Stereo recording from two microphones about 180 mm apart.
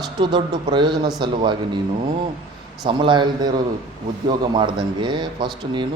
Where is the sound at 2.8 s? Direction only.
25° right (ahead or behind).